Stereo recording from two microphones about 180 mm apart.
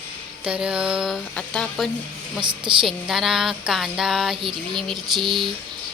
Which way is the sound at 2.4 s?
25° right (ahead or behind).